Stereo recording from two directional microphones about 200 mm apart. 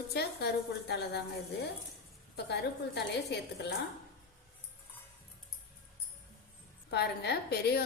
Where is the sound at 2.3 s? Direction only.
55° left (ahead or behind).